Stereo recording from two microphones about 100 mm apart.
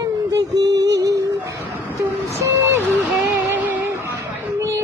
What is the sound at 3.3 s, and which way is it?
Music, 20° right (ahead or behind).